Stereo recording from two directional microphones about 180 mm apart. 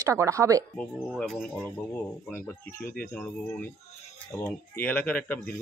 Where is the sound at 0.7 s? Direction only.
5° left (ahead or behind).